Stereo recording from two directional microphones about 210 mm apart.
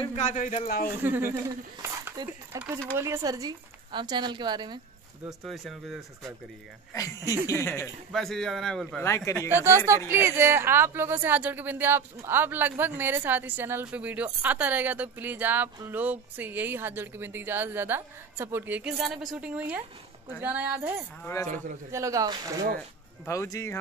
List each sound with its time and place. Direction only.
0.0 s speech: 30° left (ahead or behind)
1.0 s a woman's voice: 10° right (ahead or behind)
5.2 s speech: centre (ahead or behind)
6.9 s speech: 15° left (ahead or behind)
9.0 s speech: 15° left (ahead or behind)
9.5 s speech: 10° right (ahead or behind)
21.2 s speech: 15° left (ahead or behind)
21.9 s speech: 15° right (ahead or behind)
22.8 s speech: 15° left (ahead or behind)